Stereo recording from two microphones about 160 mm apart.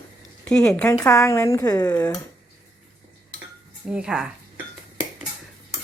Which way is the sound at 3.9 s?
5° right (ahead or behind).